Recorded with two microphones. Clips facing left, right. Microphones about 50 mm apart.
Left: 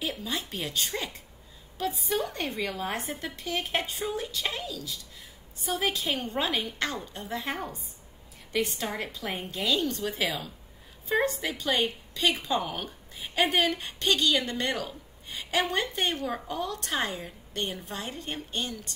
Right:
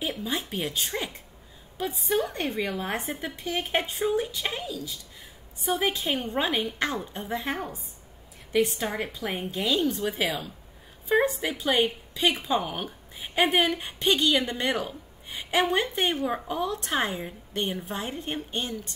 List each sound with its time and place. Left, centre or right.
0.0 s a woman's voice: centre